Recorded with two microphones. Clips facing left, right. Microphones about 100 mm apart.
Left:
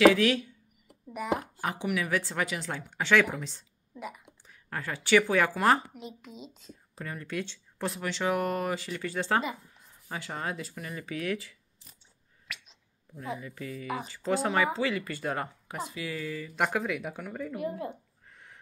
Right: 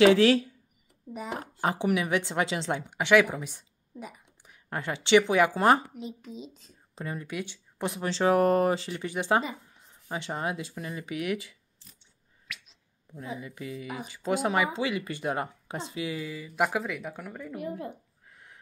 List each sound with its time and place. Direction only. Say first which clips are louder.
0.1 s speech: right 5 dB; 30° right (ahead or behind)
0.8 s a sound: left 5 dB; 75° left (ahead or behind)
1.4 s speech: right 5 dB; 30° right (ahead or behind)
2.9 s speech: right 3 dB; 15° right (ahead or behind)
4.6 s speech: right 2 dB; 25° right (ahead or behind)
5.9 s speech: right 4 dB; 40° right (ahead or behind)
7.0 s speech: right 1 dB; 20° right (ahead or behind)
8.0 s speech: right 7 dB; 30° right (ahead or behind)
13.4 s speech: right 1 dB; 20° right (ahead or behind); by 17.6 s centre (ahead or behind)
18.2 s a sound: even; 5° right (ahead or behind)